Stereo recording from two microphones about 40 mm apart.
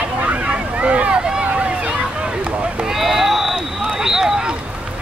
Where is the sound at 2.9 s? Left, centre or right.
Centre.